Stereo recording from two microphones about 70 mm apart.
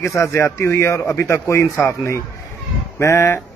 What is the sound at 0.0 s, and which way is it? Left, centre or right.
A man's voice, left.